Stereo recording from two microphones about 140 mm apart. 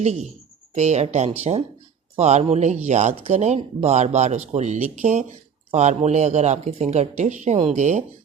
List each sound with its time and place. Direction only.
0.0 s speech: 50° right (ahead or behind)